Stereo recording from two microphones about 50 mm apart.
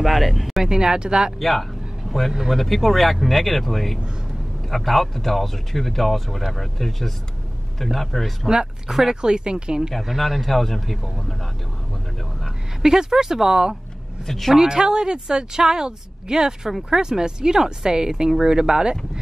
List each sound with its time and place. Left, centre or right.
0.0 s speech: centre
0.7 s a woman's voice: centre
1.4 s a sound: centre
2.5 s speech: centre
8.5 s a woman's voice: centre
9.9 s speech: centre
12.8 s a woman's voice: centre
14.2 s speech: centre
14.5 s a woman's voice: centre